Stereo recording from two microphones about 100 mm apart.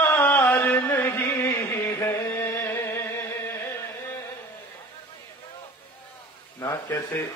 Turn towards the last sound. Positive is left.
turn(degrees=25)  # may be behind; listen again after turning